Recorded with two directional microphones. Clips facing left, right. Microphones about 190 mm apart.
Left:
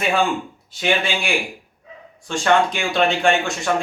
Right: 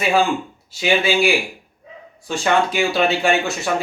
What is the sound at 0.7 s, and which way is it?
Speech, 5° right (ahead or behind).